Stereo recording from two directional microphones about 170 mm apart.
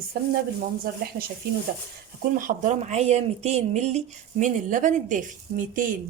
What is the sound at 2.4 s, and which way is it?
Speech, 50° right (ahead or behind).